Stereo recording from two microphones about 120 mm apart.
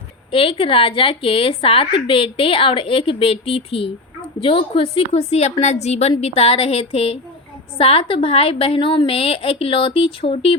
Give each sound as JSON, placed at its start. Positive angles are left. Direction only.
{"t": 0.3, "sound": "a woman's voice", "side_deg": 50}